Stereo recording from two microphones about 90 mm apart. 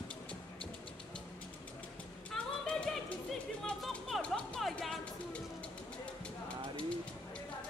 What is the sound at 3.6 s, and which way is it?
Music, centre (ahead or behind).